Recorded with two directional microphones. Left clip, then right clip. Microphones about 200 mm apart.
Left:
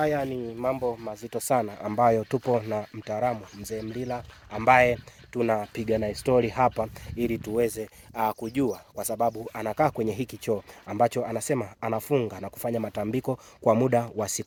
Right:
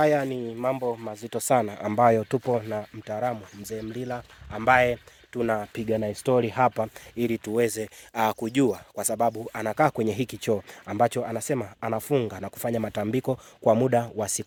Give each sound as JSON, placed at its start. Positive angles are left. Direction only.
{"t": 0.0, "sound": "speech", "side_deg": -70}
{"t": 2.4, "sound": "speech", "side_deg": 0}
{"t": 3.6, "sound": "speech", "side_deg": -10}
{"t": 4.6, "sound": "speech", "side_deg": 0}
{"t": 8.1, "sound": "speech", "side_deg": -60}
{"t": 10.9, "sound": "speech", "side_deg": -20}
{"t": 13.7, "sound": "speech", "side_deg": -10}